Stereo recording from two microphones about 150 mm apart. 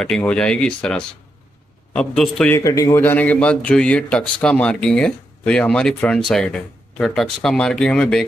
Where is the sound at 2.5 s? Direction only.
20° left (ahead or behind).